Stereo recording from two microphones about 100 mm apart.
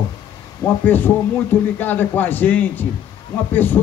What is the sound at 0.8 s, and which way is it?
Speech, 20° left (ahead or behind).